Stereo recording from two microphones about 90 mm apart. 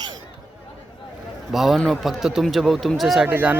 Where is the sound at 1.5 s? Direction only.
Centre (ahead or behind).